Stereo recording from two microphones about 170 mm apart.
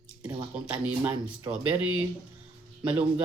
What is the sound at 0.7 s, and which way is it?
Speech, 10° right (ahead or behind).